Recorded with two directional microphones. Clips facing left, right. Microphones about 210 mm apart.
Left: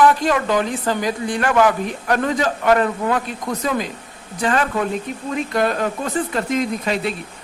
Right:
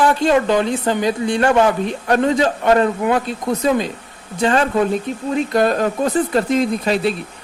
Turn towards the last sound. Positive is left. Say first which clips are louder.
# right 4 dB
turn(degrees=-35)  # may be behind; listen again after turning